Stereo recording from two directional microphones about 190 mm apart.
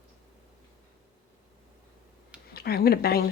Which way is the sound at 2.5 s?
55° left (ahead or behind).